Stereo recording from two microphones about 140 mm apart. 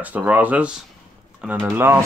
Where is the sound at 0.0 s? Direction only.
10° right (ahead or behind).